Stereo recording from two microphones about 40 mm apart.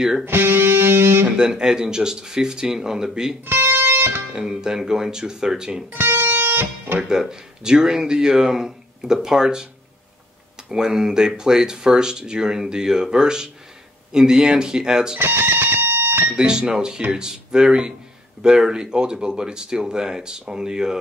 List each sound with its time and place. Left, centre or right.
0.2 s music: right
1.2 s speech: centre
3.4 s music: right
4.3 s speech: centre
5.9 s music: right
6.3 s music: right
7.0 s speech: centre
10.7 s speech: centre
15.1 s music: right
16.3 s speech: right